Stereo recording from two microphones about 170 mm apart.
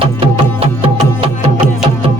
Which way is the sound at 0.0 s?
35° right (ahead or behind).